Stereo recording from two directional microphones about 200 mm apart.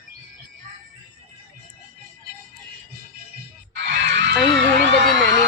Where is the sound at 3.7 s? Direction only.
60° right (ahead or behind).